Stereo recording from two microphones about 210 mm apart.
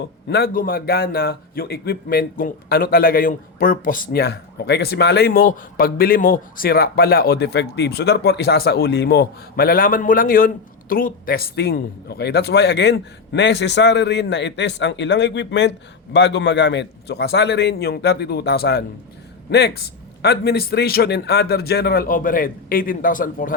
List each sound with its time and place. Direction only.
0.3 s a man's voice: 50° left (ahead or behind)